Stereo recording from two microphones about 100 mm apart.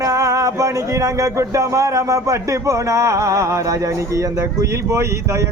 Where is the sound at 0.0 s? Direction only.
30° right (ahead or behind).